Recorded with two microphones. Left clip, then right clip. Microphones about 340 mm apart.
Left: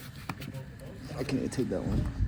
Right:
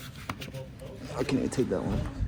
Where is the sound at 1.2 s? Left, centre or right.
Right.